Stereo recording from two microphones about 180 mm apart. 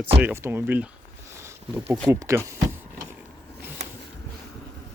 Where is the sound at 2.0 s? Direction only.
15° right (ahead or behind).